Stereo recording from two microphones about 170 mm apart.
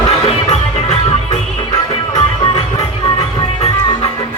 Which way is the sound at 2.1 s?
25° left (ahead or behind).